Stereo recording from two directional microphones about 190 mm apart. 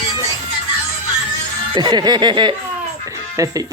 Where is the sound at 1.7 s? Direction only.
25° right (ahead or behind).